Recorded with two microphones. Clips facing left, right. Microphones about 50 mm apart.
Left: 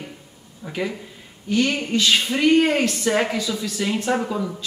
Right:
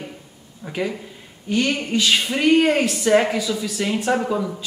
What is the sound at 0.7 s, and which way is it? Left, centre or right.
Speech, centre.